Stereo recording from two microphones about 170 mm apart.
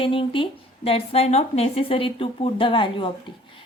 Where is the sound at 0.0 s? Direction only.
30° left (ahead or behind).